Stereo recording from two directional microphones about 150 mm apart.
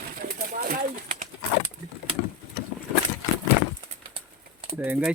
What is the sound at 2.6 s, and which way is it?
Boat, 90° left.